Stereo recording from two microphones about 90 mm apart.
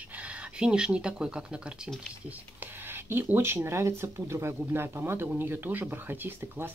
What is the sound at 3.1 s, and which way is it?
Speech, 25° right (ahead or behind).